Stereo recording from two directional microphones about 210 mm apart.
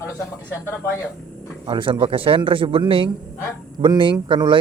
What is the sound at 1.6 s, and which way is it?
Speech, 25° right (ahead or behind).